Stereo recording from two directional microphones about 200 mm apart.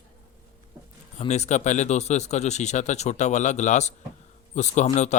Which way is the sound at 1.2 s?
35° left (ahead or behind).